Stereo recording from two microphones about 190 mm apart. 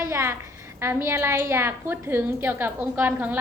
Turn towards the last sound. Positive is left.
turn(degrees=-10)  # may be behind; listen again after turning